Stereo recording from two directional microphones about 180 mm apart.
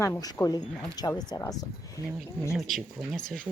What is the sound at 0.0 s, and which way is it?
Speech, 15° left (ahead or behind).